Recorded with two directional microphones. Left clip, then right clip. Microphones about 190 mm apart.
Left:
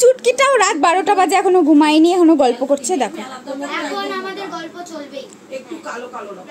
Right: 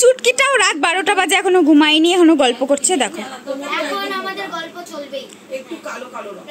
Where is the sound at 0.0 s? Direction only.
5° left (ahead or behind).